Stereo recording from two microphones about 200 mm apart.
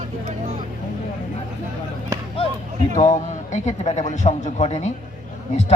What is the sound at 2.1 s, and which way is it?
Chop, 15° right (ahead or behind).